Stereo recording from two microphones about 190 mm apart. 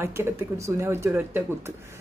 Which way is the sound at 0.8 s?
15° right (ahead or behind).